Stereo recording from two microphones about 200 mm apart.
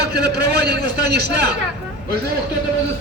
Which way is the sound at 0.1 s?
50° right (ahead or behind).